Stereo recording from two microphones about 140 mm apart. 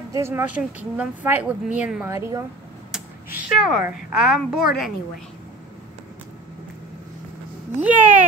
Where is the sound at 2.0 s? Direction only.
20° right (ahead or behind).